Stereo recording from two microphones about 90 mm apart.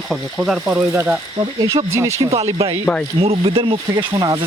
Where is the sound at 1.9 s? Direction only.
30° right (ahead or behind).